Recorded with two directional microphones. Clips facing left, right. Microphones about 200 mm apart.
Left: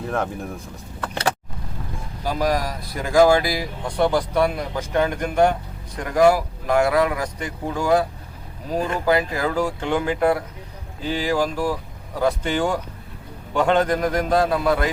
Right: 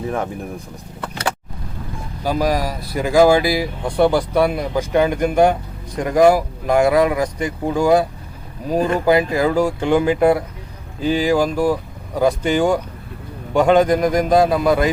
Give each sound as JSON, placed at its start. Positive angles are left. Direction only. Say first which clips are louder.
{"t": 0.0, "sound": "speech", "louder": "right 2 dB", "side_deg": -5}
{"t": 2.2, "sound": "speech", "louder": "right 3 dB", "side_deg": -5}
{"t": 9.0, "sound": "speech", "louder": "right 4 dB", "side_deg": -15}